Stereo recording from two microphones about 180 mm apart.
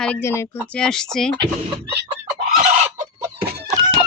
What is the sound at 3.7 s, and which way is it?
Chicken, 20° right (ahead or behind).